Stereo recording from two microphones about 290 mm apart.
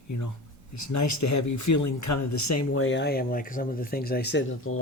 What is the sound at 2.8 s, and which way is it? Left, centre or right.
Speech, left.